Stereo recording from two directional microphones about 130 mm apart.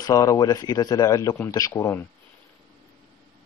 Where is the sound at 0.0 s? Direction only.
25° left (ahead or behind).